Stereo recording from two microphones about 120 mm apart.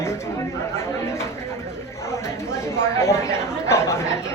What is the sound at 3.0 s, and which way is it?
Speech, 25° left (ahead or behind).